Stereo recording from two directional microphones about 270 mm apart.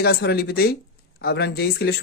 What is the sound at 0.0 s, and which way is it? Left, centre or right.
Speech, left.